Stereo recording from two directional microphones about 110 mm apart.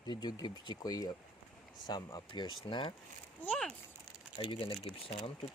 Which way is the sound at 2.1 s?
45° left (ahead or behind).